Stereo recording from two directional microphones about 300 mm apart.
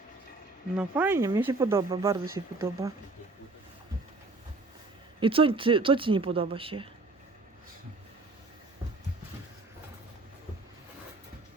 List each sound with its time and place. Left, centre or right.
0.8 s speech: centre
5.2 s speech: centre